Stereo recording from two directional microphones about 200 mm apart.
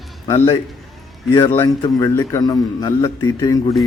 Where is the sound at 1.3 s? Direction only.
15° left (ahead or behind).